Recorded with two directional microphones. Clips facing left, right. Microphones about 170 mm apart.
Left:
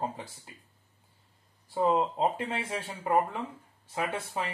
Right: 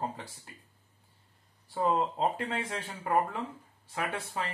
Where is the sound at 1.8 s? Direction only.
20° left (ahead or behind).